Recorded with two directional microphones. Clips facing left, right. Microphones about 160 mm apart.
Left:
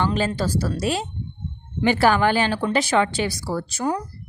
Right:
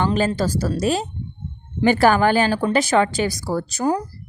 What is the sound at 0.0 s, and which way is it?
Speech, 45° right (ahead or behind).